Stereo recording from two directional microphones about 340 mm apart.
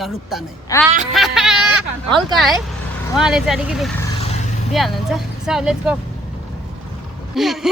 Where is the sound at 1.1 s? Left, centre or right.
Centre.